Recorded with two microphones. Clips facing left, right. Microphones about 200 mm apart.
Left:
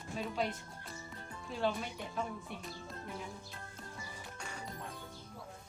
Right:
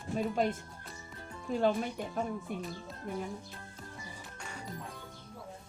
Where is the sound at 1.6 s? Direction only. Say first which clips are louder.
Right 5 dB; 50° right (ahead or behind).